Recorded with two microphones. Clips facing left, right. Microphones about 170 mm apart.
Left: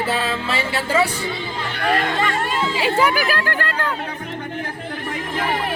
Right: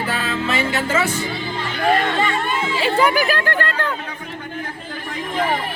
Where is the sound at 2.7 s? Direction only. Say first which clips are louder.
Right 2 dB; 10° left (ahead or behind).